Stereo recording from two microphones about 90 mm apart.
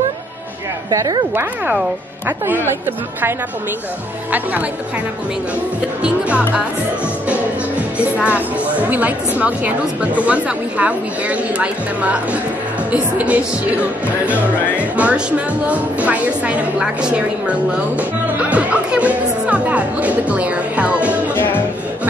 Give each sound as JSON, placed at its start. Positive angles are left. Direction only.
{"t": 0.9, "sound": "speech", "side_deg": -45}
{"t": 2.2, "sound": "a woman's voice", "side_deg": -25}
{"t": 6.0, "sound": "speech", "side_deg": -15}
{"t": 8.0, "sound": "speech", "side_deg": -15}
{"t": 21.4, "sound": "music", "side_deg": 25}